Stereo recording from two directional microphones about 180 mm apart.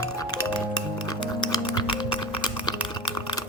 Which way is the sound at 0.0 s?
25° left (ahead or behind).